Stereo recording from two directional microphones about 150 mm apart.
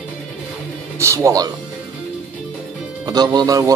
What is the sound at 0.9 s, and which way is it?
Speech, 20° right (ahead or behind).